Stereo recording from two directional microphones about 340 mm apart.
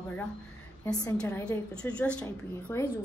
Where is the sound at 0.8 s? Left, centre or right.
Centre.